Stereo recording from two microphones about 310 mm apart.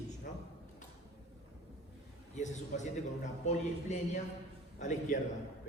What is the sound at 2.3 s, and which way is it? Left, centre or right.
A man's voice, left.